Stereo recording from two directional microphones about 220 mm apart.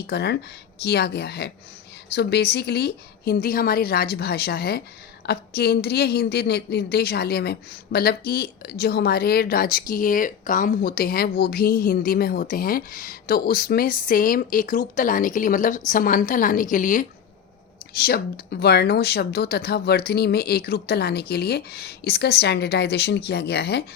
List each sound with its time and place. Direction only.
0.1 s speech: 50° left (ahead or behind)